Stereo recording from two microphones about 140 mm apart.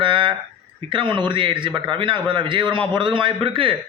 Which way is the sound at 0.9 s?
35° right (ahead or behind).